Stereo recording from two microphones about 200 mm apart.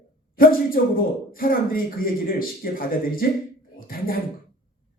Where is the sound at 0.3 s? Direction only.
45° left (ahead or behind).